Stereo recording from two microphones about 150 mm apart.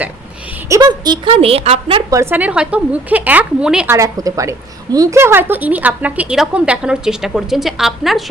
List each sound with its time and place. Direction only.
0.7 s a woman's voice: 25° right (ahead or behind)
2.0 s a woman's voice: 20° right (ahead or behind)
3.9 s a woman's voice: 20° right (ahead or behind); by 8.2 s centre (ahead or behind)